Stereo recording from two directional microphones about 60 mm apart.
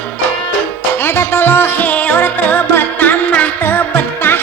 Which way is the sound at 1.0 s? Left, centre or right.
Left.